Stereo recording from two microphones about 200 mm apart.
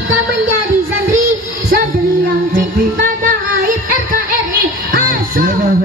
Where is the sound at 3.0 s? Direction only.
40° right (ahead or behind).